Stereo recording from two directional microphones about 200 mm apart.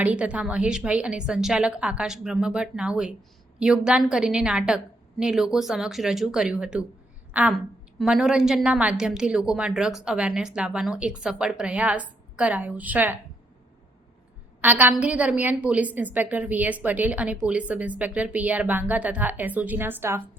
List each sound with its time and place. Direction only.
0.0 s a woman's voice: 5° right (ahead or behind)
14.6 s a woman's voice: 10° right (ahead or behind)